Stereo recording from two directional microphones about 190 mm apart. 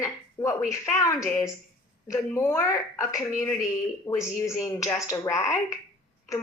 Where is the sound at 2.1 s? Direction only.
15° left (ahead or behind).